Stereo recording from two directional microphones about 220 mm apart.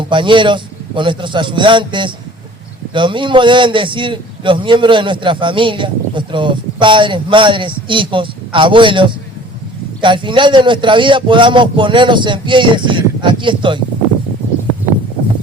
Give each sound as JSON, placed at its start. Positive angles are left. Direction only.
{"t": 0.0, "sound": "a man's voice", "side_deg": -20}